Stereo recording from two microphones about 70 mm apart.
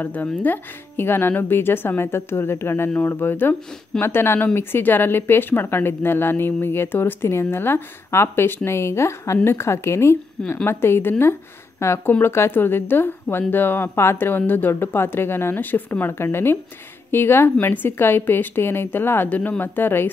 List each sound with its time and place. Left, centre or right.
0.0 s speech: left